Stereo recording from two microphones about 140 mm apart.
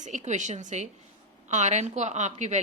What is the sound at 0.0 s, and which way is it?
A woman's voice, 60° right (ahead or behind).